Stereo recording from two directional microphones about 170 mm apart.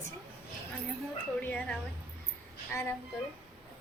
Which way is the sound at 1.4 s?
10° left (ahead or behind).